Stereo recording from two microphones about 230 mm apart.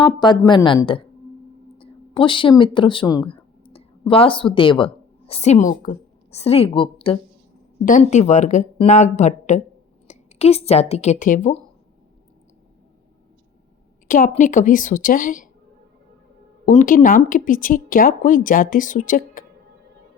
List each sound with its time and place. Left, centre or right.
0.0 s a woman's voice: centre
14.1 s speech: left
16.6 s speech: left